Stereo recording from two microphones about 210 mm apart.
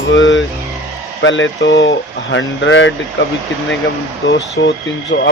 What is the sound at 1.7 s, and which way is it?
Speech, 15° left (ahead or behind).